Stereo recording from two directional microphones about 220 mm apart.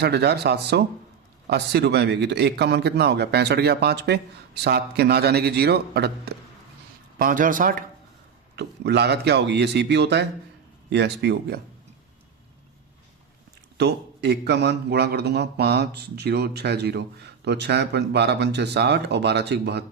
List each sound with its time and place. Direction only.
0.0 s a man's voice: 50° right (ahead or behind)
8.5 s a man's voice: 50° right (ahead or behind)
13.7 s a man's voice: 50° right (ahead or behind)